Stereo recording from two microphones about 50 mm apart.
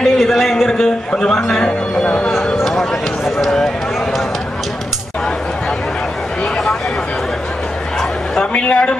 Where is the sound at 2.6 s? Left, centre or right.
Centre.